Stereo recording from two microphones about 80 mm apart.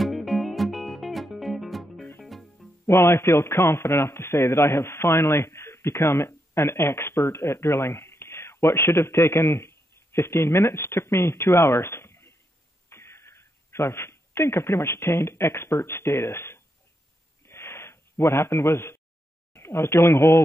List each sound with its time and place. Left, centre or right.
0.0 s music: centre
2.9 s a man's voice: left
17.5 s a sound: left
19.5 s speech: left